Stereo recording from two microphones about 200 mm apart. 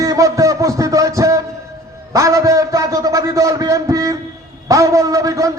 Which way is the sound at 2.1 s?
15° right (ahead or behind).